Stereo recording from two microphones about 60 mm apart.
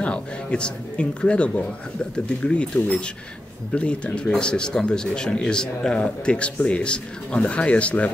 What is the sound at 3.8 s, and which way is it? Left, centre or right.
Speech, left.